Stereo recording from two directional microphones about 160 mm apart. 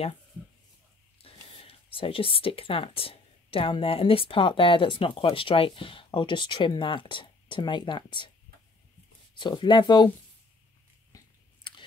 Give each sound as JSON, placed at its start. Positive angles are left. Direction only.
{"t": 1.1, "sound": "speech", "side_deg": 35}
{"t": 9.3, "sound": "speech", "side_deg": 30}
{"t": 11.1, "sound": "chewing", "side_deg": 25}